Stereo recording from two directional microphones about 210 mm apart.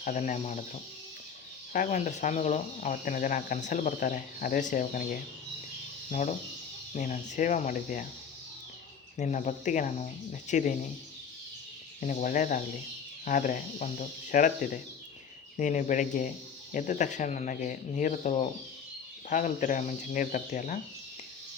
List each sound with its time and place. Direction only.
0.0 s speech: 35° left (ahead or behind)
1.7 s speech: 35° left (ahead or behind)
6.1 s speech: 35° left (ahead or behind)
9.1 s speech: 35° left (ahead or behind)
11.9 s speech: 40° left (ahead or behind)